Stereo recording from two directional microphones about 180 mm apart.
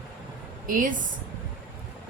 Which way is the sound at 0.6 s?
50° right (ahead or behind).